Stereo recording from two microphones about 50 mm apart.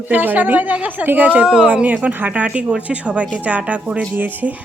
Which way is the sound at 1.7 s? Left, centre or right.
Right.